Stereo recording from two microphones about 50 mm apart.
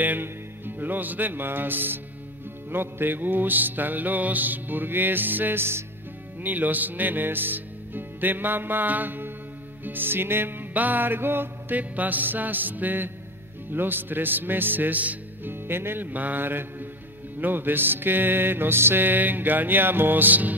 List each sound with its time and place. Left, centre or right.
0.0 s music: right
6.4 s music: right
11.7 s music: right
15.5 s music: right